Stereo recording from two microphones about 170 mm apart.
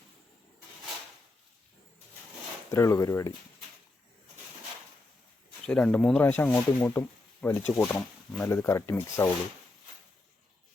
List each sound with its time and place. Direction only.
2.6 s speech: 15° left (ahead or behind)
5.6 s speech: 5° left (ahead or behind)